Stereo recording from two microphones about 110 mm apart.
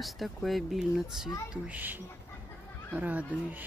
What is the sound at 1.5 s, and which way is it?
A woman's voice, 15° right (ahead or behind).